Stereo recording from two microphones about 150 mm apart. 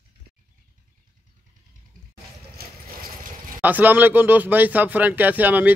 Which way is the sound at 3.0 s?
65° right (ahead or behind).